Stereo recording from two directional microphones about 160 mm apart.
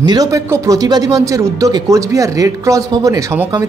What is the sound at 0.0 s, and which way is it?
Speech, 25° right (ahead or behind).